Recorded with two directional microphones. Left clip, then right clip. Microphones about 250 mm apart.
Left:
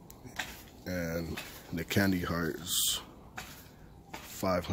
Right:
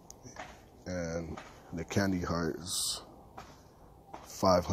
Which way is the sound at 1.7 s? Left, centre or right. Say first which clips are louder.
Left 2 dB; centre.